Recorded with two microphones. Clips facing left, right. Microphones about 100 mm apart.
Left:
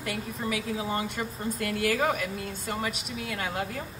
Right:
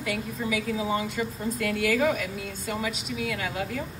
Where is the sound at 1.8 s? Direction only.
45° left (ahead or behind).